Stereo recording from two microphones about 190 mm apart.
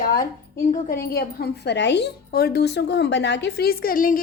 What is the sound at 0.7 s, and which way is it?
A woman's voice, 50° left (ahead or behind).